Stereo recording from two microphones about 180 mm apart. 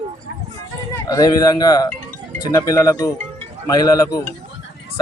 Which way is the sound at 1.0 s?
20° left (ahead or behind).